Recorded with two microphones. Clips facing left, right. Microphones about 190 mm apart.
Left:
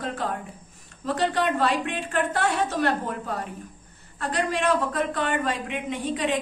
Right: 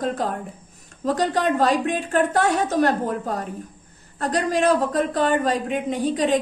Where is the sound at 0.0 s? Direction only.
40° right (ahead or behind).